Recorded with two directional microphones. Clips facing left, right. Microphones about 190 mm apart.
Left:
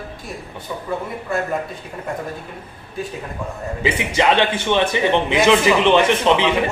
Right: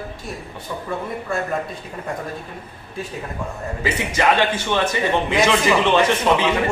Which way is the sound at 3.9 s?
20° left (ahead or behind).